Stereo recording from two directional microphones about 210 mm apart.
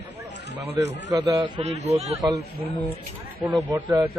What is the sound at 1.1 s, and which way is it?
A man's voice, 20° right (ahead or behind).